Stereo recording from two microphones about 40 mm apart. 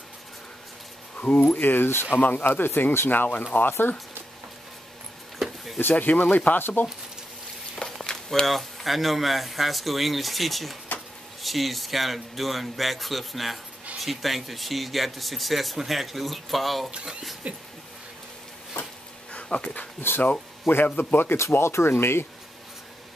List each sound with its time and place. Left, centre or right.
1.1 s a sound: left
1.5 s speech: left
1.9 s speech: left
2.1 s speech: left
5.8 s speech: left
7.8 s a sound: left
8.5 s speech: centre
16.9 s speech: centre
17.4 s speech: right
19.3 s dog: left
20.0 s speech: left